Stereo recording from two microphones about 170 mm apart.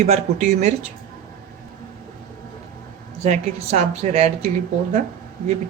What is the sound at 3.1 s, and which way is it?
A woman's voice, 40° right (ahead or behind).